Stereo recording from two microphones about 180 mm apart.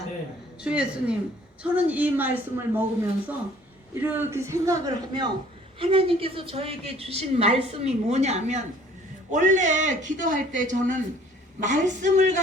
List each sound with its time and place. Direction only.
0.6 s a woman's voice: 5° right (ahead or behind); by 12.4 s 45° right (ahead or behind)